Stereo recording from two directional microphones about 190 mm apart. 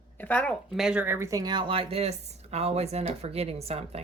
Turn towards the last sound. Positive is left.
turn(degrees=-30)  # may be behind; listen again after turning